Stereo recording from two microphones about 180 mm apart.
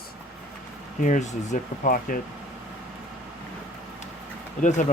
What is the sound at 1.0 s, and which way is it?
Speech, 45° left (ahead or behind).